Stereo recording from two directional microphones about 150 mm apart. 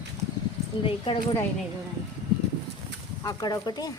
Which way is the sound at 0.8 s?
35° left (ahead or behind).